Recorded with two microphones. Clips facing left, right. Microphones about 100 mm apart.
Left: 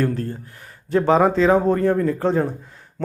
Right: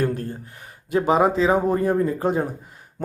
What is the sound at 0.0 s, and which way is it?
Speech, 15° right (ahead or behind).